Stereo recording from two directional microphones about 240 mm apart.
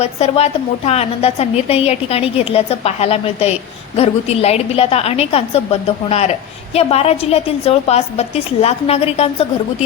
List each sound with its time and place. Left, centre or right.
0.0 s a woman's voice: left